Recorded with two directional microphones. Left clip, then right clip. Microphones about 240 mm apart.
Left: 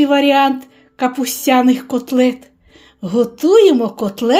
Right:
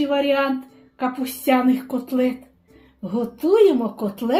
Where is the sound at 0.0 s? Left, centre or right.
Left.